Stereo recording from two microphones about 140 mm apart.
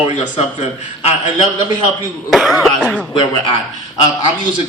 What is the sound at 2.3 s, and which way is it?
Cough, centre (ahead or behind).